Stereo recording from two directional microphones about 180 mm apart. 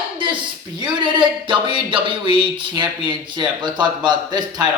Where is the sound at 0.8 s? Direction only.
25° right (ahead or behind).